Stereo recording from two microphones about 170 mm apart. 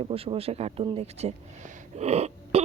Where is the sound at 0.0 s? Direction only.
35° right (ahead or behind).